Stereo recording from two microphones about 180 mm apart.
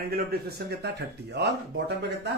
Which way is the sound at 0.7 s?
70° right (ahead or behind).